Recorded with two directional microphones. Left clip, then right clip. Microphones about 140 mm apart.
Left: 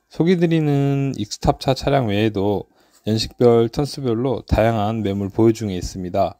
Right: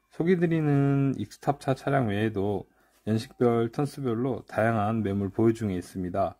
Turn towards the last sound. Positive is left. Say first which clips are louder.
# left 8 dB
turn(degrees=25)  # may be behind; listen again after turning